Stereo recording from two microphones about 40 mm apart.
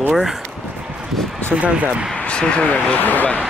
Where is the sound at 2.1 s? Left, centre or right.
Left.